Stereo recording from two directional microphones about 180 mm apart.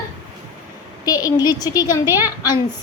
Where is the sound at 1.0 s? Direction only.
20° left (ahead or behind).